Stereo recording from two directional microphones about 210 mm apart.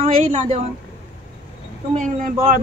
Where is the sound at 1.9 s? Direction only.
35° right (ahead or behind).